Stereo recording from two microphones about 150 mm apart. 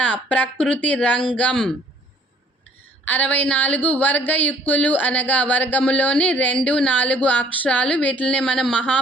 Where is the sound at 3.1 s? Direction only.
10° left (ahead or behind).